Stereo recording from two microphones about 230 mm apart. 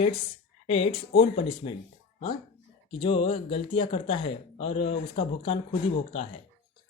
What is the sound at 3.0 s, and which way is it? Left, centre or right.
Speech, left.